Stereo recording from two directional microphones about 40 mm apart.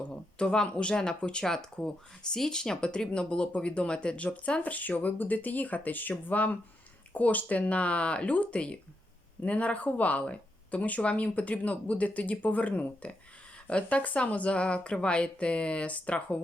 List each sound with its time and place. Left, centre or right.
0.1 s speech: left
4.6 s speech: left